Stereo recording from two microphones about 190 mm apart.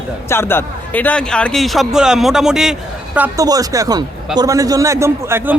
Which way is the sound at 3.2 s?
20° right (ahead or behind).